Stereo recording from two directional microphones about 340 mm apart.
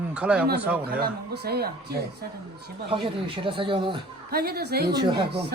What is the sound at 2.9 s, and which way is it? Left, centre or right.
Speech, centre.